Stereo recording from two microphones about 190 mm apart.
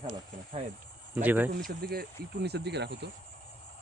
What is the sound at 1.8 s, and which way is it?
Speech, 55° right (ahead or behind).